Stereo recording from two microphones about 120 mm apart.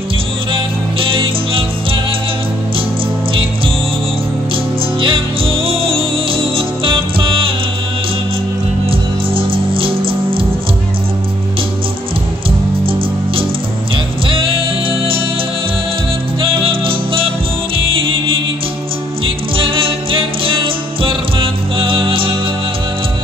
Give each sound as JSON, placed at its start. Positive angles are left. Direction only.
{"t": 0.5, "sound": "music", "side_deg": -45}
{"t": 5.0, "sound": "music", "side_deg": -45}
{"t": 8.8, "sound": "music", "side_deg": -50}
{"t": 12.4, "sound": "music", "side_deg": -50}
{"t": 16.3, "sound": "music", "side_deg": -45}